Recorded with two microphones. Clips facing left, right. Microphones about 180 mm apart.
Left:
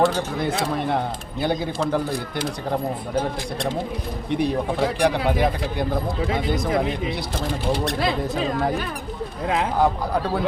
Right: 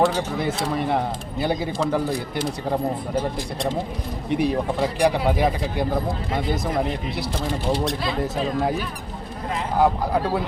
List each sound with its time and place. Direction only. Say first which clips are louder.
0.0 s speech: even; 5° right (ahead or behind)
4.3 s speech: right 1 dB; 5° right (ahead or behind)
7.9 s speech: left 2 dB; 75° left (ahead or behind)
9.8 s speech: right 1 dB; 5° right (ahead or behind)